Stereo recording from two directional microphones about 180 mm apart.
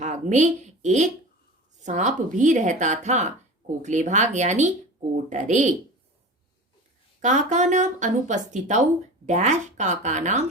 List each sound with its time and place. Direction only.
0.0 s a woman's voice: 40° right (ahead or behind)
7.2 s speech: 40° right (ahead or behind)